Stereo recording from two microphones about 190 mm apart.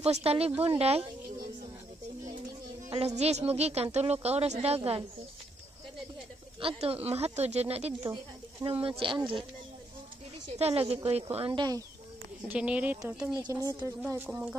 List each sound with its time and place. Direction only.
0.0 s a woman's voice: 30° right (ahead or behind)
3.2 s a woman's voice: 35° right (ahead or behind)
6.6 s a woman's voice: 30° right (ahead or behind)
10.5 s a woman's voice: 30° right (ahead or behind)
12.4 s a woman's voice: 5° right (ahead or behind)
13.4 s a woman's voice: 20° right (ahead or behind)